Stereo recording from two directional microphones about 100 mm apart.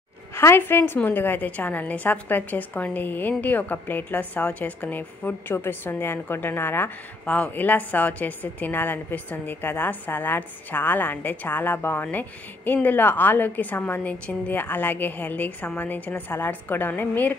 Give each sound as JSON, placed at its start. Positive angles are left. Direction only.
{"t": 0.4, "sound": "a woman's voice", "side_deg": 25}